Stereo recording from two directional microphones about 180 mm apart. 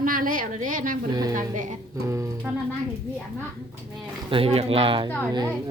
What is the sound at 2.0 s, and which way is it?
Speech, 15° right (ahead or behind).